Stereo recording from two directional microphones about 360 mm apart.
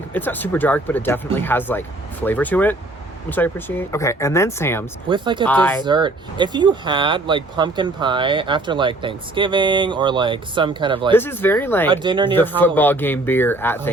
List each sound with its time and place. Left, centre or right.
0.1 s speech: centre
5.0 s speech: centre
5.5 s speech: centre
5.8 s speech: centre
11.1 s speech: centre
11.9 s speech: centre
12.3 s speech: centre